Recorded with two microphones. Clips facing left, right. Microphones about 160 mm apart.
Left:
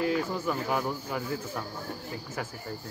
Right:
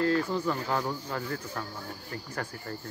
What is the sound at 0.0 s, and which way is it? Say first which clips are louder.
Speech: right 2 dB; 15° left (ahead or behind).